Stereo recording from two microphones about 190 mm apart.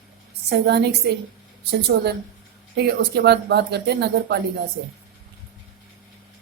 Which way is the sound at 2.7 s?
60° right (ahead or behind).